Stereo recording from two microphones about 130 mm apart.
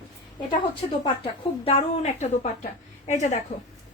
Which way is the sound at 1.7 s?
60° left (ahead or behind).